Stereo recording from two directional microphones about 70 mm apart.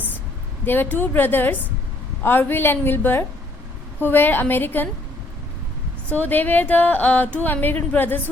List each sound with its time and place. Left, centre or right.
0.6 s a woman's voice: left
6.1 s speech: left